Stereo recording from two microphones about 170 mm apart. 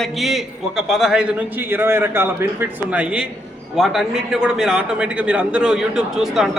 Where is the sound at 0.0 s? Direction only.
Centre (ahead or behind).